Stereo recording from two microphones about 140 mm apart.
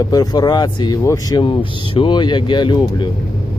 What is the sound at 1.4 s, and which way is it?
Speech, 40° left (ahead or behind).